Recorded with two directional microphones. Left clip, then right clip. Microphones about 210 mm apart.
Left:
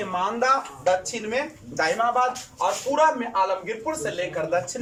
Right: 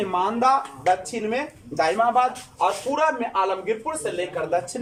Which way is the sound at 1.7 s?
20° right (ahead or behind).